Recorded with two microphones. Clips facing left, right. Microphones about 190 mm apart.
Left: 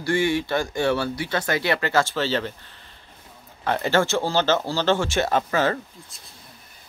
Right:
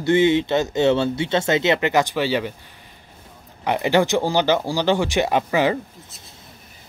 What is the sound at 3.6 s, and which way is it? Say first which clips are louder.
Speech: right 3 dB; 15° right (ahead or behind).